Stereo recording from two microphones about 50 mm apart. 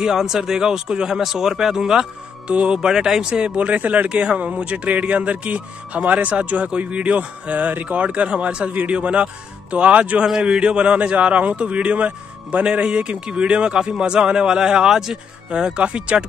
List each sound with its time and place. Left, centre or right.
0.0 s speech: centre
2.4 s speech: centre